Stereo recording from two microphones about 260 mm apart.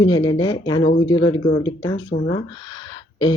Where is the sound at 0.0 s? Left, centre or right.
Centre.